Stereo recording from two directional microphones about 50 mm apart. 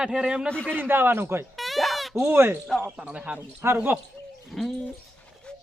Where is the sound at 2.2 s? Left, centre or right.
Right.